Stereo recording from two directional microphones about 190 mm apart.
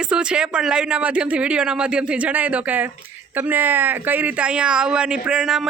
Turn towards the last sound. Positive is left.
turn(degrees=-5)  # may be behind; listen again after turning